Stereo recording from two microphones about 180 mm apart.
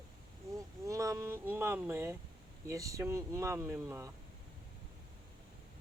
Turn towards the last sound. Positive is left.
turn(degrees=-15)  # may be behind; listen again after turning